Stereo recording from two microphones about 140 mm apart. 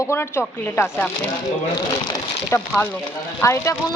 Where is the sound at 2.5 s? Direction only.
20° left (ahead or behind).